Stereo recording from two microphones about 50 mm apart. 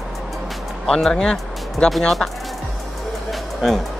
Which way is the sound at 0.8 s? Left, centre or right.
Centre.